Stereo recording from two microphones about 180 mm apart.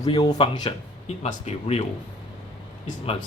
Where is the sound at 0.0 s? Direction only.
25° left (ahead or behind).